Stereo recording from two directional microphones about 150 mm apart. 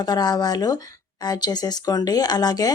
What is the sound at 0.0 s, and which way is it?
Speech, 25° left (ahead or behind).